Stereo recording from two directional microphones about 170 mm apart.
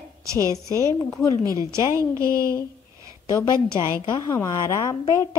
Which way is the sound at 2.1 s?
20° right (ahead or behind).